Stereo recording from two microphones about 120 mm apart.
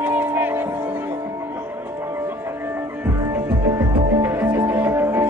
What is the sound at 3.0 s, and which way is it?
Music, 25° right (ahead or behind).